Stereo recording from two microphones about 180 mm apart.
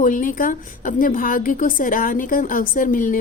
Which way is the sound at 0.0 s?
50° left (ahead or behind).